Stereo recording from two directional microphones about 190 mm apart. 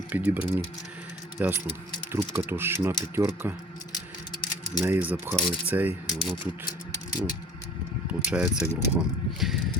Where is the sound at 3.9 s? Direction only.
20° left (ahead or behind).